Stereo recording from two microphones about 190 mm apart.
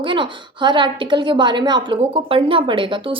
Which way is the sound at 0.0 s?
25° right (ahead or behind).